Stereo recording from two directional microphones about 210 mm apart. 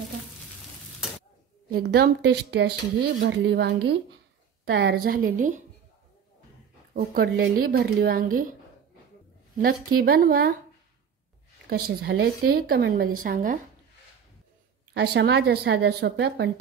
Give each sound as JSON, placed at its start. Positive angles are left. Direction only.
{"t": 1.7, "sound": "a woman's voice", "side_deg": -50}
{"t": 6.9, "sound": "a woman's voice", "side_deg": -45}
{"t": 9.6, "sound": "a woman's voice", "side_deg": -45}
{"t": 11.7, "sound": "a woman's voice", "side_deg": -50}
{"t": 15.0, "sound": "a woman's voice", "side_deg": -55}